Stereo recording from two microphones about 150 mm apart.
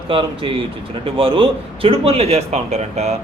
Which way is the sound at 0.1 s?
35° right (ahead or behind).